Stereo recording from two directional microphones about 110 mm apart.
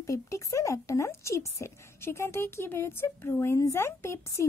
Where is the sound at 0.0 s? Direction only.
25° left (ahead or behind).